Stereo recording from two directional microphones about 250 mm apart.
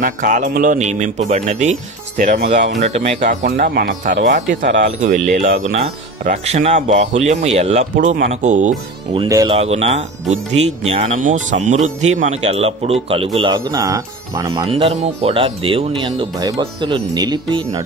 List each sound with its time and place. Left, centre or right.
0.0 s speech: right
5.5 s speech: right
5.8 s speech: right